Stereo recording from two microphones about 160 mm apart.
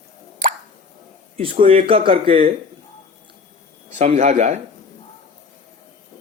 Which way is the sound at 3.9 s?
45° right (ahead or behind).